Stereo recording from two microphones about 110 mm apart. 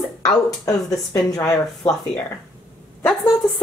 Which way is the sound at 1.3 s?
35° left (ahead or behind).